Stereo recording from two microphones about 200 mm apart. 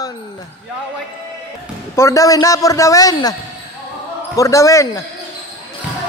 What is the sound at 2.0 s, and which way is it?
A man's voice, 15° left (ahead or behind).